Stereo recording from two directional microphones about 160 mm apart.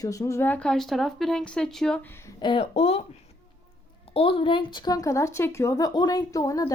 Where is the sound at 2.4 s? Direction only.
35° left (ahead or behind).